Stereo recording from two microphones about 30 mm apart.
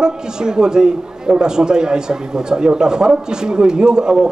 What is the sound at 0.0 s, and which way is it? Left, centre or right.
A man's voice, right.